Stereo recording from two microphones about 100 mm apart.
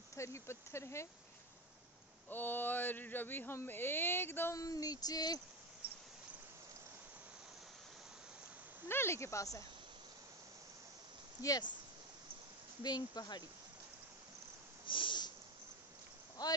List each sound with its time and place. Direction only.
0.1 s speech: 30° left (ahead or behind)
2.2 s speech: 20° left (ahead or behind)
4.6 s a sound: 35° left (ahead or behind)
8.8 s speech: 25° left (ahead or behind)
12.8 s speech: 40° left (ahead or behind)
14.9 s snort: 55° left (ahead or behind)
16.4 s speech: 40° left (ahead or behind)